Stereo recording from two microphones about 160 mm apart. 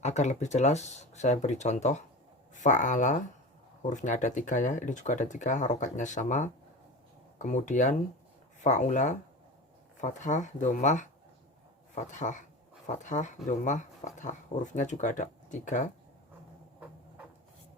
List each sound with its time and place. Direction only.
0.0 s speech: 45° left (ahead or behind)